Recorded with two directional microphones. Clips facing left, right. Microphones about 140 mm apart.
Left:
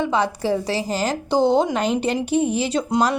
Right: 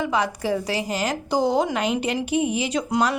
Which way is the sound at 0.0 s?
30° left (ahead or behind).